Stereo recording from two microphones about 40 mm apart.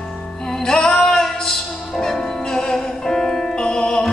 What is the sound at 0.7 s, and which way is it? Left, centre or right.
Music, centre.